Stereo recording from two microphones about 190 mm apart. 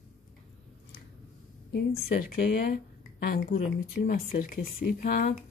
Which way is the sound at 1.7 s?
55° left (ahead or behind).